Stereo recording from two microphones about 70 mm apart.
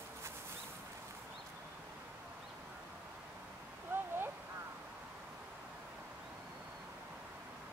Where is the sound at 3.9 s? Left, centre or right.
Right.